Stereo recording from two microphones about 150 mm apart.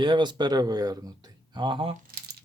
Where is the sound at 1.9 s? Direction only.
75° right (ahead or behind).